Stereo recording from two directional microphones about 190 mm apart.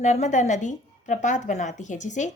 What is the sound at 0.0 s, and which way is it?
A woman's voice, 40° left (ahead or behind).